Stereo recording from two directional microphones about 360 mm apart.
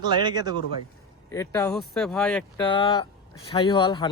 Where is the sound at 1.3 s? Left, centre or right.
Centre.